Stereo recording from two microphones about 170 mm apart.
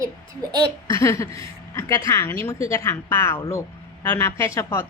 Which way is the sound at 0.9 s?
15° left (ahead or behind).